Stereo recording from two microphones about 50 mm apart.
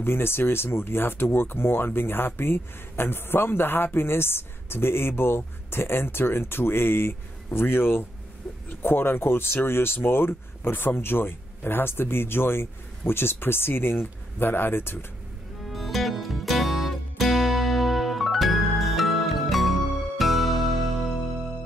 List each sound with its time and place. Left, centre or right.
0.0 s speech: left
15.6 s music: centre